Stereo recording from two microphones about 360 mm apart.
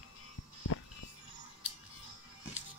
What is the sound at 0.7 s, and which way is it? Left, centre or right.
Music, left.